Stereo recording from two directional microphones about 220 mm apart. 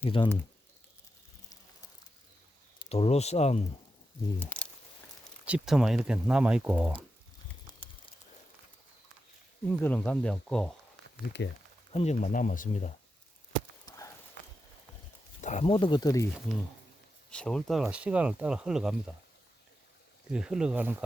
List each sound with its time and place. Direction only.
0.0 s speech: 25° left (ahead or behind)
2.7 s speech: 25° left (ahead or behind)
4.4 s speech: 5° left (ahead or behind)
7.7 s a sound: 25° left (ahead or behind)
9.6 s speech: 5° left (ahead or behind)
11.4 s speech: 55° left (ahead or behind)
11.9 s speech: 30° left (ahead or behind)
13.8 s a sound: 15° left (ahead or behind)
15.4 s speech: 30° left (ahead or behind); by 16.3 s 15° left (ahead or behind)
17.3 s speech: 5° left (ahead or behind)
20.3 s speech: 5° right (ahead or behind)